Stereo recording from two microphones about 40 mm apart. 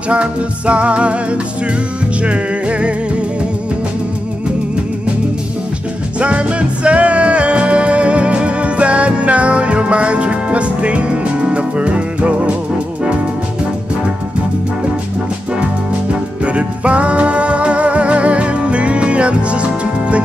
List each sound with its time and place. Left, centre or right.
0.1 s music: right
6.1 s music: right
16.4 s music: right